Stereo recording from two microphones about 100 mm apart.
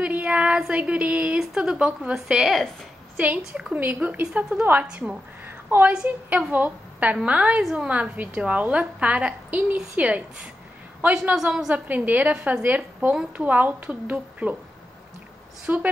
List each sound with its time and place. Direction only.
0.0 s a sound: 15° right (ahead or behind)
1.4 s a woman's voice: 5° right (ahead or behind)
3.2 s a woman's voice: 15° right (ahead or behind)
11.7 s a woman's voice: 15° right (ahead or behind)
15.6 s a woman's voice: 15° right (ahead or behind)